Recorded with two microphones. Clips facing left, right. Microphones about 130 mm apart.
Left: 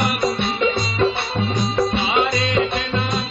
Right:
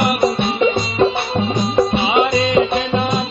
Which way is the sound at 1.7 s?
15° right (ahead or behind).